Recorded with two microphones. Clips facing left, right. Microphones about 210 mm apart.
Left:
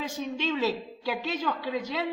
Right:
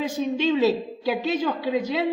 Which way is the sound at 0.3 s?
25° right (ahead or behind).